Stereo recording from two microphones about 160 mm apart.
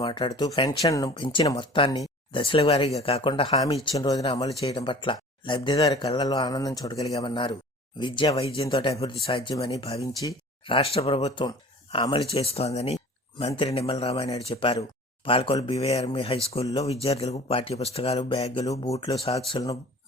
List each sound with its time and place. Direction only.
0.0 s speech: 30° left (ahead or behind)
0.8 s speech: 20° left (ahead or behind)
1.2 s speech: 35° left (ahead or behind)
3.9 s speech: 20° left (ahead or behind)
4.6 s speech: 35° left (ahead or behind)